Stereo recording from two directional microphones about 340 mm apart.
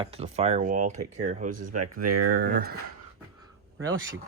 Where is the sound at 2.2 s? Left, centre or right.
Right.